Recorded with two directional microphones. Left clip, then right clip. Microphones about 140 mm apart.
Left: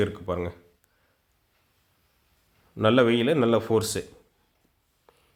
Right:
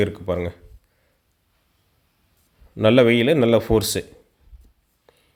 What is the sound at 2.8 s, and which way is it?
Speech, 30° right (ahead or behind).